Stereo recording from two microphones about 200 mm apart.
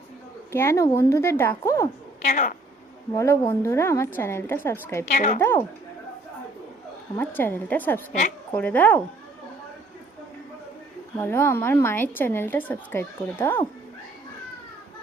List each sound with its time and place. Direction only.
0.5 s a woman's voice: 10° left (ahead or behind)
2.2 s speech: 40° left (ahead or behind)
3.2 s a woman's voice: 15° left (ahead or behind)
5.0 s speech: 40° left (ahead or behind)
5.4 s a woman's voice: 10° left (ahead or behind)
7.2 s a woman's voice: 10° left (ahead or behind)
11.2 s a woman's voice: 10° left (ahead or behind)